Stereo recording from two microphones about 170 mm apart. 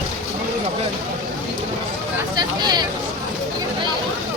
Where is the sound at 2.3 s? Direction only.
25° right (ahead or behind).